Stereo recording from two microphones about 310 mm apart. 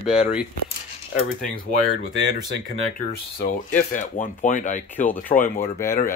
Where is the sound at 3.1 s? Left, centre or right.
Left.